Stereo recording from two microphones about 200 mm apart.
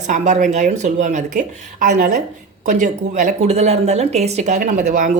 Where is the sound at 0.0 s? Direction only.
35° right (ahead or behind).